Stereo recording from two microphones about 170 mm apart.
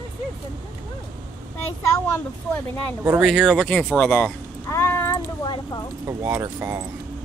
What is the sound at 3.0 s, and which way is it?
Speech, 5° right (ahead or behind).